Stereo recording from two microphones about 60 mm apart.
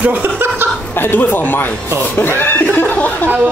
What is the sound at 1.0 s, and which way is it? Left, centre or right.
Speech, left.